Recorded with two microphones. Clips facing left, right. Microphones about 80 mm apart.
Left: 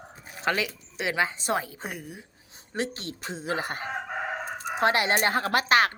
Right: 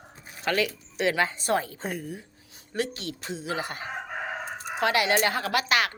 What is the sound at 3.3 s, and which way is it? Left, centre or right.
Speech, left.